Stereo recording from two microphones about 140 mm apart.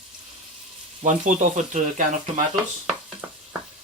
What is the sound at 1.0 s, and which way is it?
Speech, 60° right (ahead or behind).